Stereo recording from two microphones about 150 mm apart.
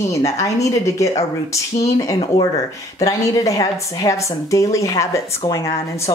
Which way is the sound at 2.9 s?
20° left (ahead or behind).